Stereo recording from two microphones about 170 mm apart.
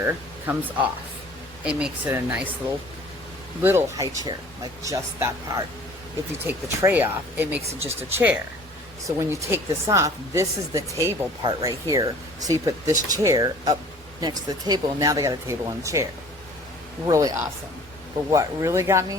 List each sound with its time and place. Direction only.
0.0 s speech: 10° right (ahead or behind)
3.6 s speech: 15° right (ahead or behind)
9.5 s speech: 15° right (ahead or behind)
17.1 s speech: 20° right (ahead or behind)